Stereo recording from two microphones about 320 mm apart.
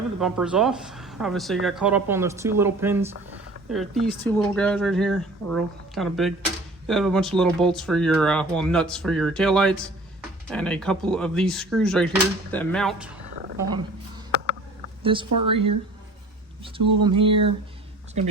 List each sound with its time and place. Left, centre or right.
0.2 s speech: centre
15.0 s speech: centre